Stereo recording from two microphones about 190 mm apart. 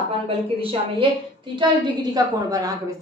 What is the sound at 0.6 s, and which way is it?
A woman's voice, 30° right (ahead or behind).